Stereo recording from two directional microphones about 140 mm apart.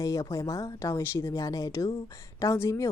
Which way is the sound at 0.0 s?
25° left (ahead or behind).